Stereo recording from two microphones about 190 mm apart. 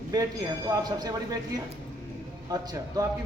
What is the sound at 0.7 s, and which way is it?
A man's voice, 20° right (ahead or behind).